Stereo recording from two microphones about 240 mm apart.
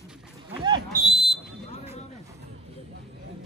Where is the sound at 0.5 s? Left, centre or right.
Centre.